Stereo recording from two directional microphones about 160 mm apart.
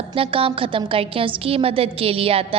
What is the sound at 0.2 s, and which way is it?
A woman's voice, 35° right (ahead or behind).